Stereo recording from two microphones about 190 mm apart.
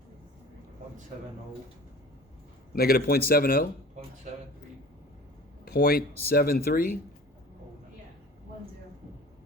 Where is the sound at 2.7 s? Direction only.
55° left (ahead or behind).